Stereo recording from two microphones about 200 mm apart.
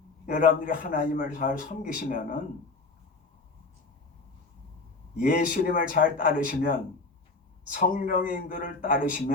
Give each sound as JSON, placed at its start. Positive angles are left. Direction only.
{"t": 0.3, "sound": "a man's voice", "side_deg": 40}
{"t": 5.1, "sound": "a man's voice", "side_deg": 45}